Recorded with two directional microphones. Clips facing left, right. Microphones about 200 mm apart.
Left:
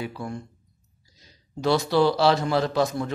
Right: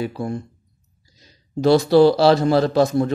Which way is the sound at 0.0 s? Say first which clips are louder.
Right 7 dB; 35° right (ahead or behind).